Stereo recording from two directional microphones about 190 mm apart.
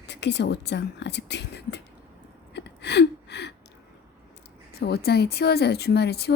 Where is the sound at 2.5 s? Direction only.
65° left (ahead or behind).